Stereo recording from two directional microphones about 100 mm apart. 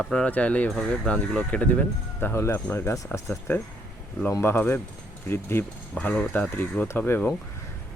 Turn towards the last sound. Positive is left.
turn(degrees=20)  # may be behind; listen again after turning